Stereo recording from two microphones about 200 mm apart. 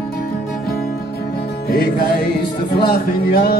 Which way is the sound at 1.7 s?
50° left (ahead or behind).